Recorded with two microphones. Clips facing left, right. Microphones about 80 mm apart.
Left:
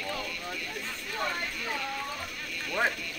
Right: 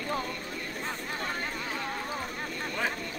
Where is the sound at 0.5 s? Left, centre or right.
Right.